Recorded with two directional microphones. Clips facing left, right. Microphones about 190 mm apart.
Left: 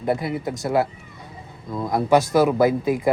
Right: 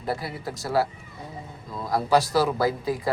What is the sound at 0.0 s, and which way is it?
Speech, 20° left (ahead or behind).